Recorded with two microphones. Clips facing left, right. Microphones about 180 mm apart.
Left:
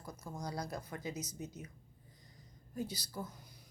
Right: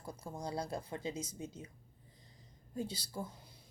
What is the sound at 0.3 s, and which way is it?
Speech, 30° right (ahead or behind).